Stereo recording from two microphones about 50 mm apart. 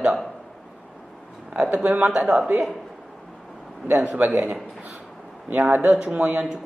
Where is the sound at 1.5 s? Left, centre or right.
Right.